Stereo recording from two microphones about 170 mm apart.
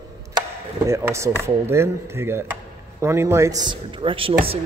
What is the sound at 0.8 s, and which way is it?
Speech, 15° right (ahead or behind).